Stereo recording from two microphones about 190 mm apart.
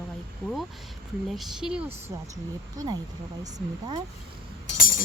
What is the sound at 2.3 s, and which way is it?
Speech, 20° right (ahead or behind).